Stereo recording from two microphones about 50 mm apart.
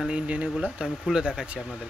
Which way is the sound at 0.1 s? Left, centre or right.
Right.